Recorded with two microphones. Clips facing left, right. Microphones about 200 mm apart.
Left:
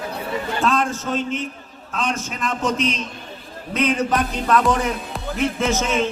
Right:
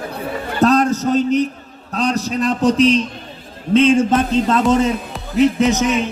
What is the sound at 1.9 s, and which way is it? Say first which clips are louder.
A man's voice: right 6 dB; 40° right (ahead or behind).